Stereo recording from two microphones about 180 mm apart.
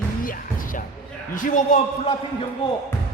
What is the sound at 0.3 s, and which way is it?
Music, 50° left (ahead or behind).